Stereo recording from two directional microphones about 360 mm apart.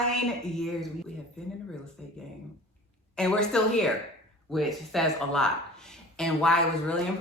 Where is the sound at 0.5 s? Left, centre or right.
Centre.